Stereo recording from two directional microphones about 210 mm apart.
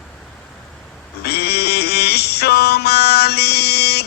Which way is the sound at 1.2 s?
50° left (ahead or behind).